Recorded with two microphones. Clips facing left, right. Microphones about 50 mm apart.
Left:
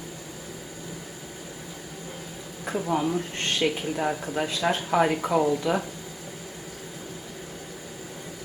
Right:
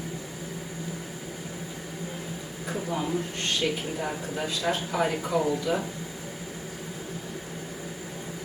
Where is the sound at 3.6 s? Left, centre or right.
Left.